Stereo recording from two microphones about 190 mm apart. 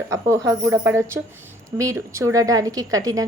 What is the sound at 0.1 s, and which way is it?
A woman's voice, 15° right (ahead or behind).